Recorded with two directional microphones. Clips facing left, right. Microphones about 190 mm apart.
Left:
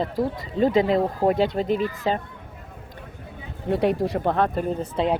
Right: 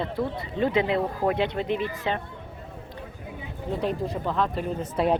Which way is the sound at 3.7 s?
70° left (ahead or behind).